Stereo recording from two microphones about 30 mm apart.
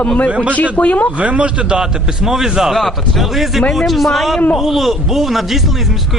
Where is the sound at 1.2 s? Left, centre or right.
Right.